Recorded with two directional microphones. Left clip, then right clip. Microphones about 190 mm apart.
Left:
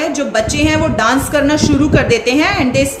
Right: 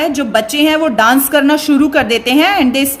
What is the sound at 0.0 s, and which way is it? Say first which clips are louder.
A woman's voice: right 2 dB; 55° right (ahead or behind).